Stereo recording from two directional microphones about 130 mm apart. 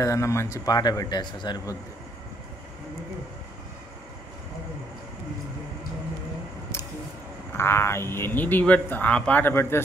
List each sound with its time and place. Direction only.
0.0 s speech: 25° left (ahead or behind)
7.5 s speech: 20° left (ahead or behind)